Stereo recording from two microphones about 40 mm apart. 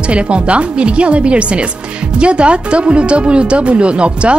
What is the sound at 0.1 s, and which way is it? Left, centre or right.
Speech, right.